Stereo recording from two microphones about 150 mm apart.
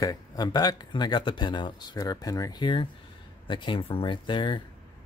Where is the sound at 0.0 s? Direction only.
25° left (ahead or behind).